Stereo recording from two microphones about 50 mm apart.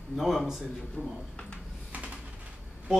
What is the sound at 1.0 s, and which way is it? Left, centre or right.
Speech, right.